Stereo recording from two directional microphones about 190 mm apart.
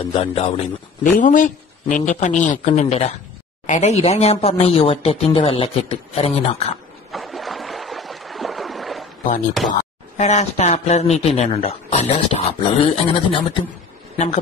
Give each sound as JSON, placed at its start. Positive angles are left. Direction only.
{"t": 0.0, "sound": "a man's voice", "side_deg": 30}
{"t": 1.2, "sound": "speech", "side_deg": 45}
{"t": 7.1, "sound": "a sound", "side_deg": 0}
{"t": 9.7, "sound": "speech", "side_deg": 35}
{"t": 14.1, "sound": "speech", "side_deg": 40}